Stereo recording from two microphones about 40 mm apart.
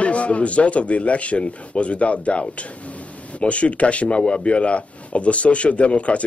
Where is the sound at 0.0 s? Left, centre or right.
Left.